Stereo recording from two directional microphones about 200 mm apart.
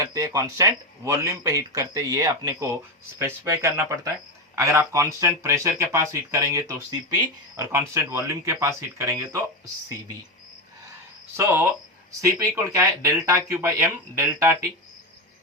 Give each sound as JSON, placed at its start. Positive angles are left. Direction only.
{"t": 0.0, "sound": "speech", "side_deg": -15}
{"t": 11.3, "sound": "speech", "side_deg": -10}